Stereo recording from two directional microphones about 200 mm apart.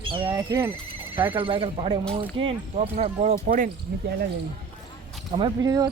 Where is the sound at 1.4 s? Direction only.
25° right (ahead or behind).